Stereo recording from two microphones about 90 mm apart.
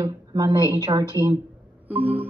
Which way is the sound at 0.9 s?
60° right (ahead or behind).